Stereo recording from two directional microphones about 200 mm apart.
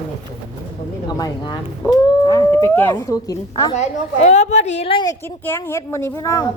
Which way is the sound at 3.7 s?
35° left (ahead or behind).